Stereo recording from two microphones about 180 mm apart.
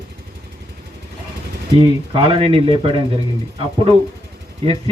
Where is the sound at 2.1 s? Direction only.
30° right (ahead or behind).